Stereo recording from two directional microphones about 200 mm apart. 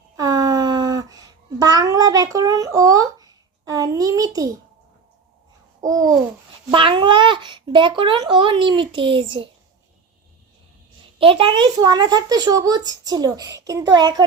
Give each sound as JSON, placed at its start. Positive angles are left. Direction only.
{"t": 0.2, "sound": "a sound", "side_deg": -20}
{"t": 5.8, "sound": "babbling", "side_deg": -20}
{"t": 6.7, "sound": "speech", "side_deg": -25}
{"t": 11.2, "sound": "speech", "side_deg": -25}